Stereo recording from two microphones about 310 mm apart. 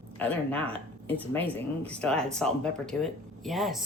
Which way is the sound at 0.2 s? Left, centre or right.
Centre.